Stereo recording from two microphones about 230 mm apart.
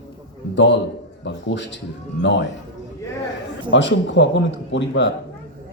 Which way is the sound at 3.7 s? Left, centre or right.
Left.